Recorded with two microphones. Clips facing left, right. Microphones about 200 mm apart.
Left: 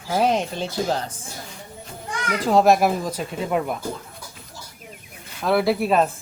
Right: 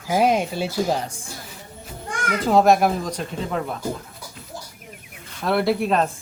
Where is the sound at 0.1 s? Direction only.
10° right (ahead or behind).